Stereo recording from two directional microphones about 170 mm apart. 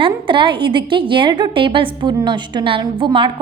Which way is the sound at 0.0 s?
30° right (ahead or behind).